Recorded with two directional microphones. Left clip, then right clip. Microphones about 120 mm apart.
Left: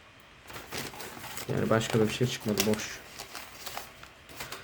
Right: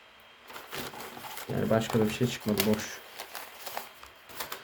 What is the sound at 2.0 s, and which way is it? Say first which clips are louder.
Speech: even; 25° left (ahead or behind).